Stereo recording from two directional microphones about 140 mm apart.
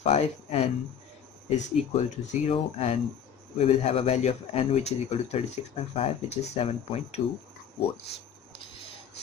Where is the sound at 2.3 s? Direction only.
50° left (ahead or behind).